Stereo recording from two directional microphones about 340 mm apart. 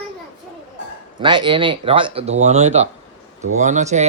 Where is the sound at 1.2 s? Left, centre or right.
Centre.